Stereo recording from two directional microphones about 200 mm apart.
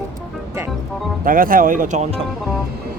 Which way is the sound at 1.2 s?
45° right (ahead or behind).